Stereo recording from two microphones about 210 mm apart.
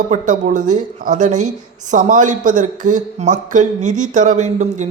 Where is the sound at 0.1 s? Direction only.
35° right (ahead or behind).